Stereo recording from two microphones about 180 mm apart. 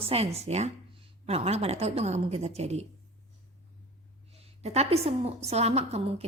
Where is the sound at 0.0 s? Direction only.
35° right (ahead or behind).